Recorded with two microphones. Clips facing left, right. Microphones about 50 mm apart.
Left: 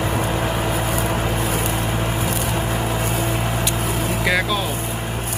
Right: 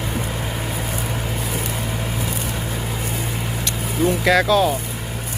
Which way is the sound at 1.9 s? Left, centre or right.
Left.